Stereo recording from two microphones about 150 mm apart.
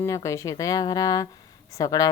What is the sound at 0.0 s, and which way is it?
Speech, 20° left (ahead or behind).